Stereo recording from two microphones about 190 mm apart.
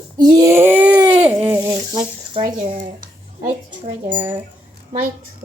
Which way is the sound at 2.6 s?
40° right (ahead or behind).